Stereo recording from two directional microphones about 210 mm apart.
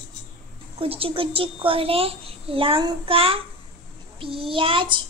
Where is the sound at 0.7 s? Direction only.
25° right (ahead or behind).